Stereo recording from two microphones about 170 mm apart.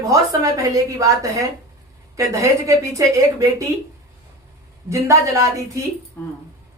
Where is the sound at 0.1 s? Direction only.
20° right (ahead or behind).